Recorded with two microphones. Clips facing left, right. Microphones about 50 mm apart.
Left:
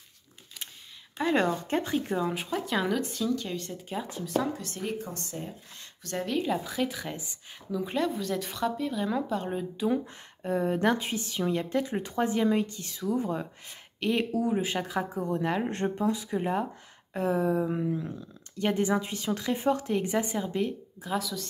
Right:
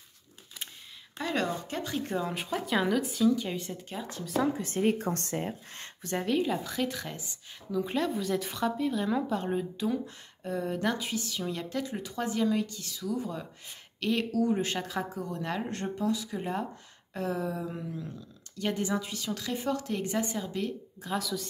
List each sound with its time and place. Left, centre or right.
1.3 s a woman's voice: left
2.0 s speech: centre
3.7 s speech: centre
4.6 s a woman's voice: right
4.9 s speech: right
6.1 s speech: centre
9.8 s a woman's voice: left
14.5 s speech: centre
15.1 s a woman's voice: left
16.3 s a woman's voice: centre
20.6 s speech: centre